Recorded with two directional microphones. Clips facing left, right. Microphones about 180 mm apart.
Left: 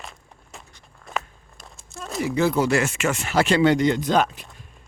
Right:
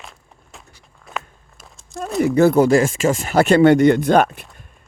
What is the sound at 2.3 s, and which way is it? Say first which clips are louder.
Speech: right 7 dB; 55° right (ahead or behind).